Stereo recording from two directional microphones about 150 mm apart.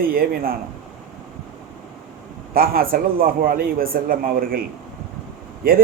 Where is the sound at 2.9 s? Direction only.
75° right (ahead or behind).